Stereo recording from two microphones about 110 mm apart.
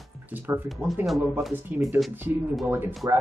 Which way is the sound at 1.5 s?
15° right (ahead or behind).